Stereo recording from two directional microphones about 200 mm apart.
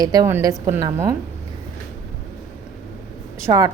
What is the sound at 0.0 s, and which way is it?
A woman's voice, 20° right (ahead or behind).